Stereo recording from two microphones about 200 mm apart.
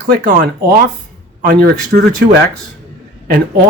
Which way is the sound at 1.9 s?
50° right (ahead or behind).